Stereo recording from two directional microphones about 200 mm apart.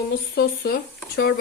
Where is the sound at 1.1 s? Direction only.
50° left (ahead or behind).